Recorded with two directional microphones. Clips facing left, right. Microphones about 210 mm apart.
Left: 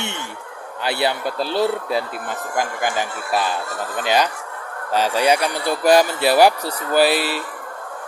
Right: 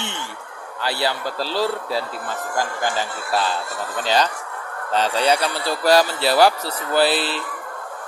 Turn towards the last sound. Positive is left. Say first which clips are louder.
# left 2 dB
turn(degrees=10)  # may be behind; listen again after turning